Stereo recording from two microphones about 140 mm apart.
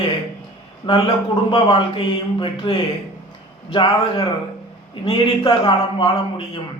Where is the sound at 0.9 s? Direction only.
35° left (ahead or behind).